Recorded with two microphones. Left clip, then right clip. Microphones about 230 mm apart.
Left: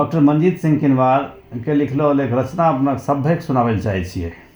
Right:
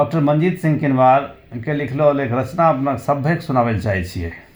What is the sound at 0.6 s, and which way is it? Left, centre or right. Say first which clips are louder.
Speech: right 4 dB; right.